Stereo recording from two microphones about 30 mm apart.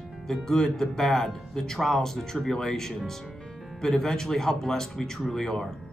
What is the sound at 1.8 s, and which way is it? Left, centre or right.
Speech, centre.